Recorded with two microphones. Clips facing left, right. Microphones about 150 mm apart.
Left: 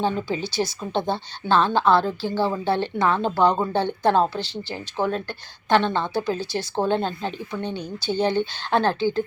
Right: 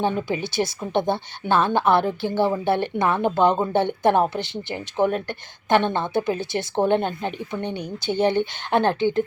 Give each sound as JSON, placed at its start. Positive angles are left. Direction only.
{"t": 0.0, "sound": "speech", "side_deg": -20}